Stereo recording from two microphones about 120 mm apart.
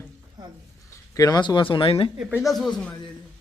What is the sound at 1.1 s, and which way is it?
Speech, 30° left (ahead or behind).